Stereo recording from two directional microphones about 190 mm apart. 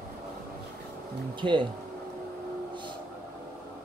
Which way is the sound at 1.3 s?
25° right (ahead or behind).